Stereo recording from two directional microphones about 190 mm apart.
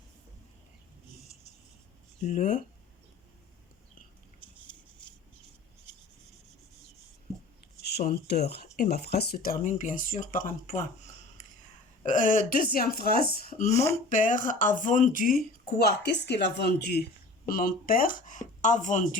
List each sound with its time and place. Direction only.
2.2 s speech: 45° left (ahead or behind)
7.8 s speech: 55° left (ahead or behind)
10.7 s a sound: 40° left (ahead or behind)
12.0 s speech: 45° left (ahead or behind)
17.5 s speech: 45° left (ahead or behind)